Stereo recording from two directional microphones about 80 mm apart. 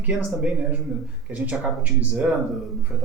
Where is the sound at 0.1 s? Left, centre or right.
Centre.